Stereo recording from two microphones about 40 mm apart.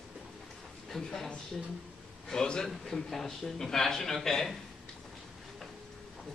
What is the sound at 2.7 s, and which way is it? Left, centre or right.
A man's voice, centre.